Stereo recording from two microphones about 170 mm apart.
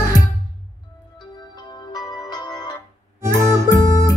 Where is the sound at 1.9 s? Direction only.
25° left (ahead or behind).